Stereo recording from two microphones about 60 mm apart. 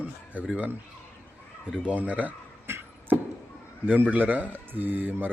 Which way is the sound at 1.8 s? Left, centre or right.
Right.